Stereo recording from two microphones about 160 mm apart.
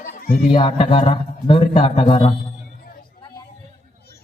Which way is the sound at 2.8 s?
65° left (ahead or behind).